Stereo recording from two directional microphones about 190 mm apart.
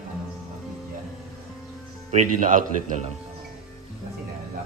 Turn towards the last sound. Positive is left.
turn(degrees=-45)  # may be behind; listen again after turning